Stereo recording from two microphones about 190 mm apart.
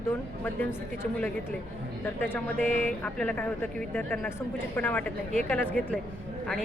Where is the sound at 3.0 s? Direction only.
5° left (ahead or behind).